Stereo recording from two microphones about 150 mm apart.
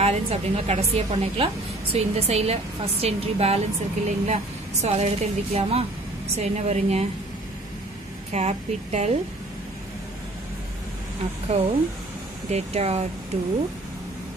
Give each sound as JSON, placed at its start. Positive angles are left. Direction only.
{"t": 0.0, "sound": "a woman's voice", "side_deg": -45}
{"t": 8.3, "sound": "a woman's voice", "side_deg": -45}
{"t": 11.4, "sound": "a woman's voice", "side_deg": -45}